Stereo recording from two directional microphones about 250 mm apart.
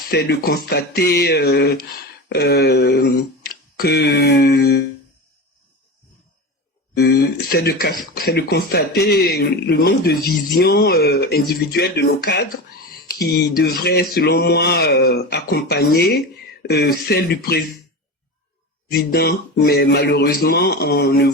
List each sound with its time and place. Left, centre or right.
0.1 s speech: left
6.9 s speech: left
18.9 s speech: left